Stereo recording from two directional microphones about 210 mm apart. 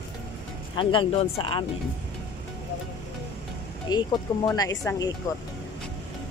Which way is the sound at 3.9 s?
20° left (ahead or behind).